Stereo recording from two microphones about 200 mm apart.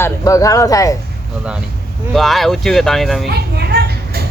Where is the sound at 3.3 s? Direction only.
55° right (ahead or behind).